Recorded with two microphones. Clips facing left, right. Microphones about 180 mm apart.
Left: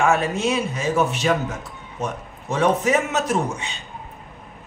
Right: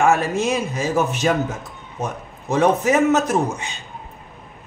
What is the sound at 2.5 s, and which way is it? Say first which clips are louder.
Speech: right 2 dB; 45° right (ahead or behind).